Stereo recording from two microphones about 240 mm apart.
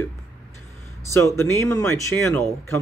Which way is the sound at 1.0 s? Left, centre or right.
Centre.